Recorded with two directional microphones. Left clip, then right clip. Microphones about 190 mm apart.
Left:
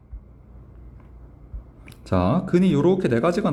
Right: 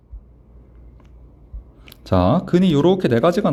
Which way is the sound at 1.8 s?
30° right (ahead or behind).